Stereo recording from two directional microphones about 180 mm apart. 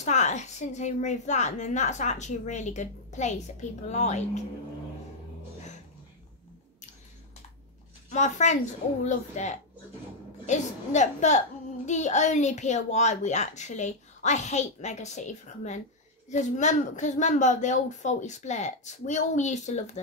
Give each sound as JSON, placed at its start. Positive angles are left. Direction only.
{"t": 0.0, "sound": "a child's voice", "side_deg": 40}
{"t": 8.1, "sound": "a child's voice", "side_deg": 40}